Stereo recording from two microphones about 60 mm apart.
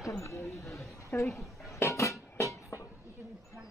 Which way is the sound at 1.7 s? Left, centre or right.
Left.